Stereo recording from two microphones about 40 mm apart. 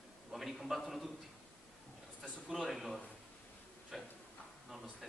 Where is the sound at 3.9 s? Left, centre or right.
Centre.